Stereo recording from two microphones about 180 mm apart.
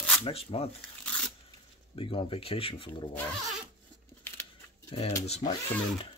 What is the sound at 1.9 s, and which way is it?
Speech, 30° left (ahead or behind).